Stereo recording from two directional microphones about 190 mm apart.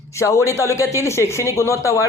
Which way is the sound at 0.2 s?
15° left (ahead or behind).